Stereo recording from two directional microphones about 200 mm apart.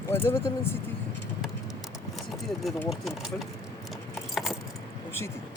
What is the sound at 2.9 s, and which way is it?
Speech, centre (ahead or behind).